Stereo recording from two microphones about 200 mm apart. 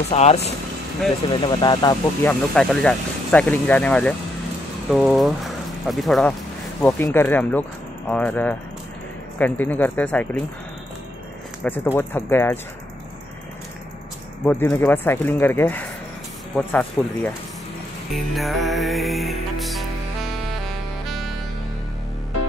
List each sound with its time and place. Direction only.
0.1 s speech: 30° left (ahead or behind)
2.2 s speech: 5° left (ahead or behind)
11.6 s speech: 10° left (ahead or behind)
14.4 s speech: 10° left (ahead or behind)
18.1 s music: centre (ahead or behind)